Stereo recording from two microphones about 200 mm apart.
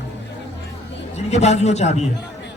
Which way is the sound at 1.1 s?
35° left (ahead or behind).